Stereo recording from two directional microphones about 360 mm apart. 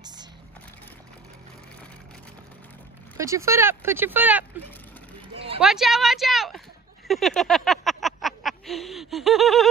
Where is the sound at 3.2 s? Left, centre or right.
Centre.